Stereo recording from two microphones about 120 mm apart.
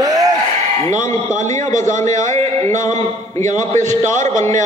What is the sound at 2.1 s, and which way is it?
Speech, 85° right.